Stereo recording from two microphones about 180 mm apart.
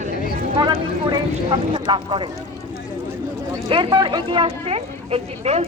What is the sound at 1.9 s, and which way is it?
Speech, 25° right (ahead or behind).